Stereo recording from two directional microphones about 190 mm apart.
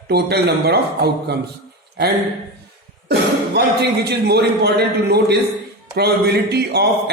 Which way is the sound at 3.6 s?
60° right (ahead or behind).